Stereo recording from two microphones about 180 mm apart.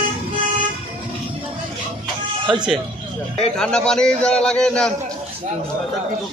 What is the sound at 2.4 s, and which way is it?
Speech, 25° right (ahead or behind).